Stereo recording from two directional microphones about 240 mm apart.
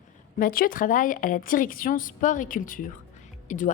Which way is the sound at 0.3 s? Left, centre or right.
Left.